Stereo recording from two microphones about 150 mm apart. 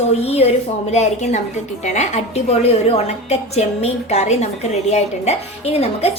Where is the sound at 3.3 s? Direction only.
45° left (ahead or behind).